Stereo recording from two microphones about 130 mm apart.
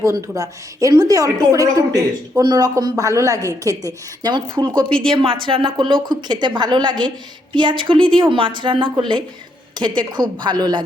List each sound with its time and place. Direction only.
0.0 s a woman's voice: 25° right (ahead or behind)